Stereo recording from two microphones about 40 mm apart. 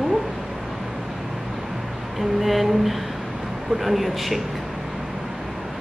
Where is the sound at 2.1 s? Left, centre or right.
Centre.